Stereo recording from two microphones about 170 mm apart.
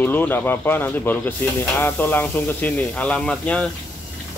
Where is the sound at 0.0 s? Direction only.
10° left (ahead or behind).